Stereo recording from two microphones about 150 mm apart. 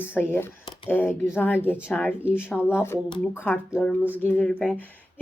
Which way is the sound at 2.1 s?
5° right (ahead or behind).